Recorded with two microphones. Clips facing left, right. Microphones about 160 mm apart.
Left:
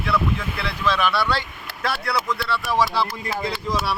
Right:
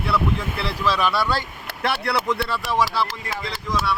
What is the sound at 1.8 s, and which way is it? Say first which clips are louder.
Speech: right 2 dB; 65° right (ahead or behind).